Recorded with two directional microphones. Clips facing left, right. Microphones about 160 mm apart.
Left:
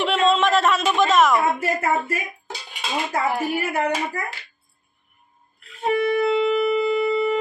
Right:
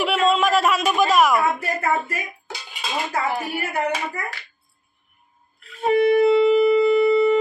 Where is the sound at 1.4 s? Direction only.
25° left (ahead or behind).